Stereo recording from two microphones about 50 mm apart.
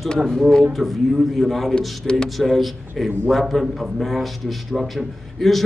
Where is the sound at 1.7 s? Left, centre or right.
Centre.